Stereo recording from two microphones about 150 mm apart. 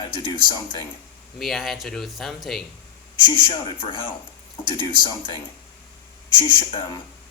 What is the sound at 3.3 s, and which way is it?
Speech, 30° left (ahead or behind).